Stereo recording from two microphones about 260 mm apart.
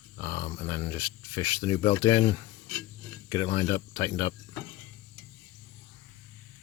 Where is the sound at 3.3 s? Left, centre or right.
Centre.